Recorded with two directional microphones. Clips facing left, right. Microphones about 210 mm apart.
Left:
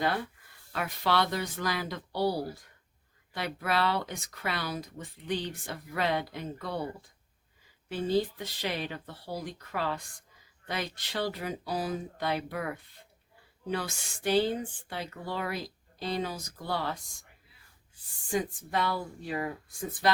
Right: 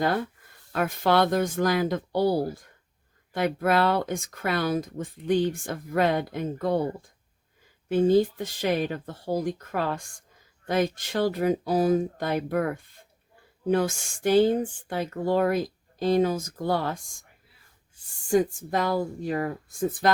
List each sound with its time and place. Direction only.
0.0 s speech: 45° right (ahead or behind)
7.9 s speech: 50° right (ahead or behind)
18.3 s speech: 45° right (ahead or behind)